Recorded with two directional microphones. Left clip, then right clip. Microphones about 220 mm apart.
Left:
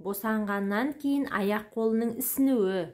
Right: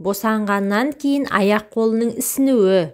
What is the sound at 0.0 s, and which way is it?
Speech, 30° right (ahead or behind).